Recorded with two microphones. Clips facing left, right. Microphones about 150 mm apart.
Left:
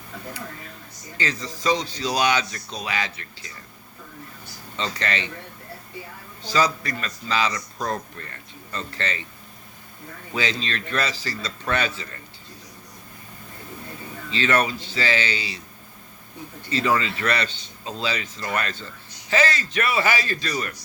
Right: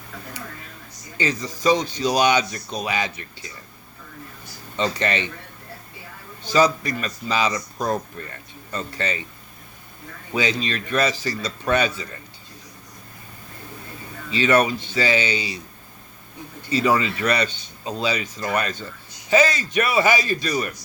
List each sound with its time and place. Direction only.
1.2 s speech: 20° right (ahead or behind)
4.8 s speech: 20° right (ahead or behind)
6.4 s speech: 20° right (ahead or behind)
10.3 s speech: 15° right (ahead or behind)
14.3 s speech: 15° right (ahead or behind)
16.7 s speech: 15° right (ahead or behind)